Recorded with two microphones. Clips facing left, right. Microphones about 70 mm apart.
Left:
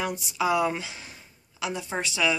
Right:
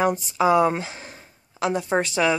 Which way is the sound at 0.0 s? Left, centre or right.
Right.